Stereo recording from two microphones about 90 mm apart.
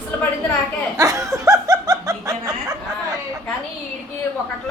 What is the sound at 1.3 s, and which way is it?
Snicker, 40° right (ahead or behind).